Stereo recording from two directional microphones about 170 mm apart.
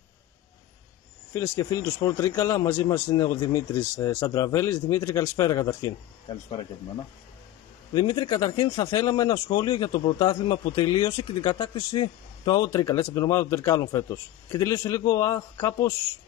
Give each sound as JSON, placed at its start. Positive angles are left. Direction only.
{"t": 1.3, "sound": "a man's voice", "side_deg": 20}
{"t": 7.9, "sound": "speech", "side_deg": 25}